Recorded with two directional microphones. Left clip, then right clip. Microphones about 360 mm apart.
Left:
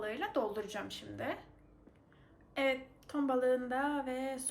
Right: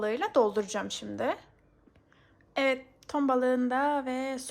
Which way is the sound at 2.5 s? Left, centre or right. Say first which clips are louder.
Right 6 dB; centre.